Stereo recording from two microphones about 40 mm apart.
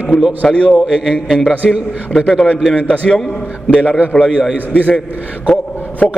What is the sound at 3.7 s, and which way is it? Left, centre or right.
Speech, left.